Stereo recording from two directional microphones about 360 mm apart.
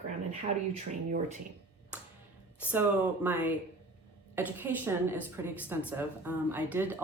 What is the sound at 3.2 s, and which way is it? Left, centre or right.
A woman's voice, centre.